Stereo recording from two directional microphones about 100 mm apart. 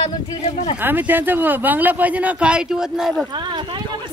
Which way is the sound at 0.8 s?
20° right (ahead or behind).